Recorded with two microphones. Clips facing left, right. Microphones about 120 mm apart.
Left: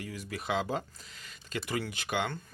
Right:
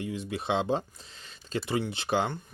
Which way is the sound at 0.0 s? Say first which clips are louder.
Right 6 dB; 25° right (ahead or behind).